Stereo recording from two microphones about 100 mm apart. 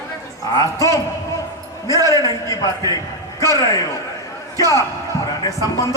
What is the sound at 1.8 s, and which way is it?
Speech, 35° right (ahead or behind).